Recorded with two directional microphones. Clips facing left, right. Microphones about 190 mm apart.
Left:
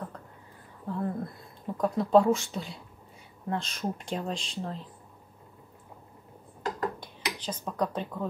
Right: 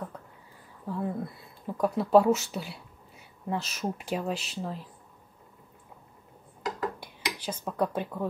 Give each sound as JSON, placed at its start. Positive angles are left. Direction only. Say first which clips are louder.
{"t": 0.8, "sound": "speech", "louder": "even", "side_deg": -5}
{"t": 7.0, "sound": "speech", "louder": "even", "side_deg": -10}